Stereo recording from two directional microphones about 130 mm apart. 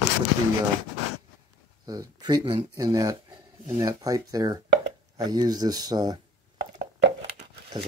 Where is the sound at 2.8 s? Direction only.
25° right (ahead or behind).